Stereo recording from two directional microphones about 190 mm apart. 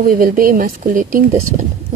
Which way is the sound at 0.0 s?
45° right (ahead or behind).